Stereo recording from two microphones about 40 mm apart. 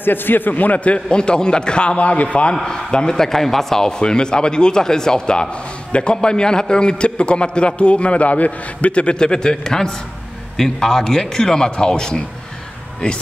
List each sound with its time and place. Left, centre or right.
0.0 s a man's voice: left
1.0 s a man's voice: left
2.6 s a man's voice: left
4.0 s a man's voice: left